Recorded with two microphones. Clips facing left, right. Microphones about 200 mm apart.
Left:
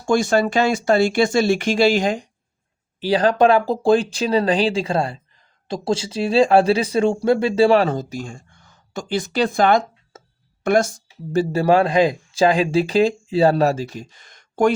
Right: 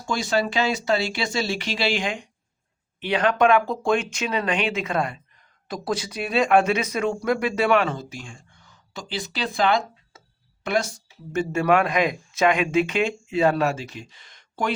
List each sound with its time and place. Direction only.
0.0 s a woman's voice: 50° left (ahead or behind)
11.3 s speech: 35° left (ahead or behind)